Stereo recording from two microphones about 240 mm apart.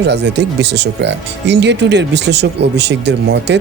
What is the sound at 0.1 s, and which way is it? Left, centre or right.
Speech, right.